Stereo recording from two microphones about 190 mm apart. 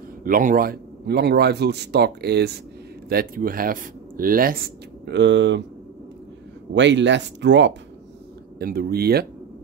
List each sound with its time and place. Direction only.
0.2 s speech: 45° right (ahead or behind); by 5.6 s 70° right (ahead or behind)
6.7 s speech: 70° right (ahead or behind)
8.5 s speech: 50° right (ahead or behind)